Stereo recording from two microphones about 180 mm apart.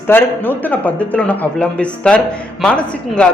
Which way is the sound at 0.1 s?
10° left (ahead or behind).